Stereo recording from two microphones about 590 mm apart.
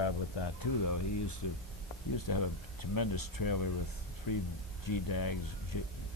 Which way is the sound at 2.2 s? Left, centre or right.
Left.